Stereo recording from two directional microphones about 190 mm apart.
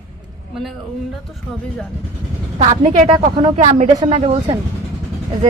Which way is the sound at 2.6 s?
35° right (ahead or behind).